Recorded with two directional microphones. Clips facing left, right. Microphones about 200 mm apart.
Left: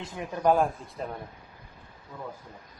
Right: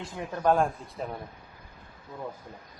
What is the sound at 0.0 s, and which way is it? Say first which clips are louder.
Speech: left 1 dB; 15° left (ahead or behind).